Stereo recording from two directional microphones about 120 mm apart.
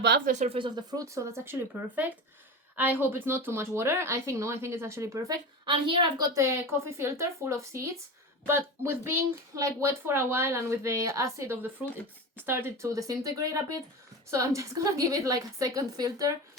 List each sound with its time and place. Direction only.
0.3 s speech: 85° right
0.5 s speech: 40° right (ahead or behind); by 1.5 s 25° right (ahead or behind)
2.7 s speech: 15° right (ahead or behind)
5.6 s a woman's voice: 45° right (ahead or behind)
6.3 s speech: 25° right (ahead or behind)